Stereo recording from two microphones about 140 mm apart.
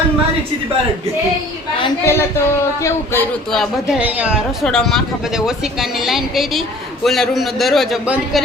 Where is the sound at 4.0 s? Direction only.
10° right (ahead or behind).